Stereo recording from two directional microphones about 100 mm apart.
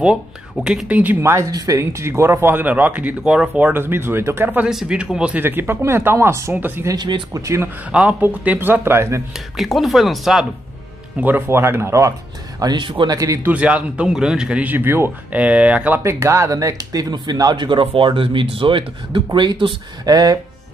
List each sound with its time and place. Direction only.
0.7 s a man's voice: 10° right (ahead or behind)
1.2 s speech: 30° right (ahead or behind)
4.6 s a man's voice: 10° right (ahead or behind)
5.4 s speech: 20° right (ahead or behind)
7.0 s speech: 50° right (ahead or behind)
7.3 s speech: 30° right (ahead or behind)
7.9 s speech: 10° right (ahead or behind)
9.3 s speech: centre (ahead or behind)
11.1 s speech: 15° right (ahead or behind)
12.5 s speech: 45° right (ahead or behind)
13.1 s speech: 35° right (ahead or behind)
13.4 s a man's voice: 15° right (ahead or behind)
16.0 s speech: 30° right (ahead or behind)